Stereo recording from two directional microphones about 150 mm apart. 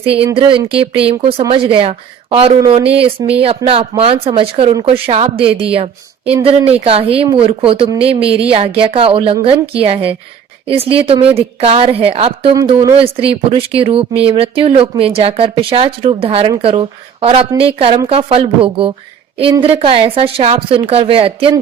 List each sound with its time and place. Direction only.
0.0 s speech: 40° right (ahead or behind)
6.7 s speech: 40° right (ahead or behind)